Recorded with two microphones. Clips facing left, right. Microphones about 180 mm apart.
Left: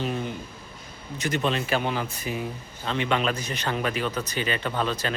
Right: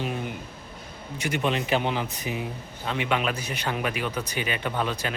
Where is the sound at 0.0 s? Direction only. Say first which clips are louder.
Left 2 dB; 10° right (ahead or behind).